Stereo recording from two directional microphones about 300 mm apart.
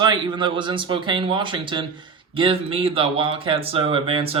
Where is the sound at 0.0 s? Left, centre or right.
Centre.